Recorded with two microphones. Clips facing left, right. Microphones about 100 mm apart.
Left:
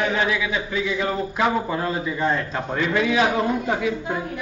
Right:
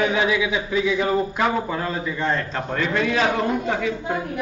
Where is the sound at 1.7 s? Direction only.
10° left (ahead or behind).